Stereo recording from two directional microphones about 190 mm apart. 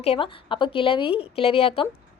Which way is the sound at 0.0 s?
30° left (ahead or behind).